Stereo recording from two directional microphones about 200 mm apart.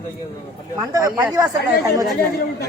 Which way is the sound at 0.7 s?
15° right (ahead or behind).